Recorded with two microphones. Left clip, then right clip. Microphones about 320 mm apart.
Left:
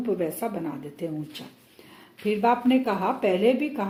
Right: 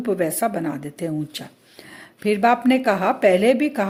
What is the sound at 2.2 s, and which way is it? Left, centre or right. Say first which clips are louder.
Speech: right 5 dB; right.